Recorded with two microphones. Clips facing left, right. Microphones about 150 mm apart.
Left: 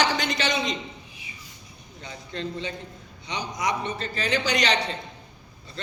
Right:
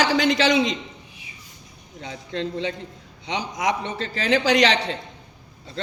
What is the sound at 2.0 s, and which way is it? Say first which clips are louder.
A man's voice: right 5 dB; 90° right.